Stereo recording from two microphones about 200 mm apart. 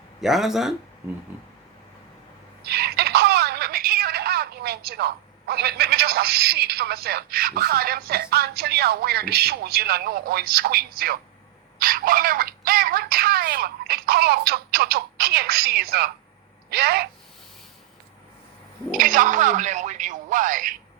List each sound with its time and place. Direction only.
0.2 s speech: centre (ahead or behind)
2.6 s speech: 55° right (ahead or behind)
11.8 s a sound: 45° right (ahead or behind)
16.6 s speech: 50° right (ahead or behind)
18.9 s speech: 45° right (ahead or behind)